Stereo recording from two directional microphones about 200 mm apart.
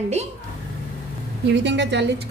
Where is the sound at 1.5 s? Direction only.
60° right (ahead or behind).